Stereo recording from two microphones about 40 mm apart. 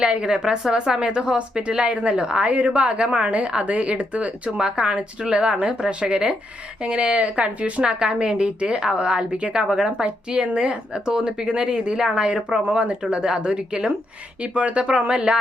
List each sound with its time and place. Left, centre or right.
0.2 s speech: centre
6.8 s speech: right
7.8 s speech: right